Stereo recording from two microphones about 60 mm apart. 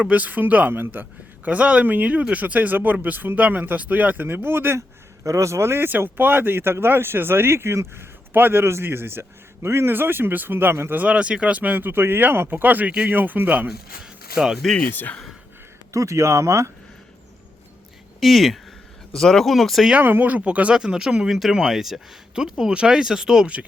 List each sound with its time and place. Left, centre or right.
0.0 s speech: right
1.5 s speech: right
5.2 s speech: right
6.0 s speech: right
11.0 s speech: centre
13.7 s speech: centre
14.8 s speech: left
15.9 s speech: right
18.2 s speech: centre
20.0 s speech: right; by 23.6 s centre